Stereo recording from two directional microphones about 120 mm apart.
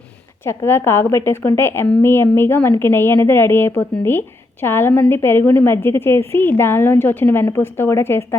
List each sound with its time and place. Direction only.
0.4 s a woman's voice: 20° left (ahead or behind)